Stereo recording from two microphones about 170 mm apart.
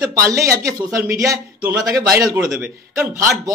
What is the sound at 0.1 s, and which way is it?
A man's voice, 20° right (ahead or behind).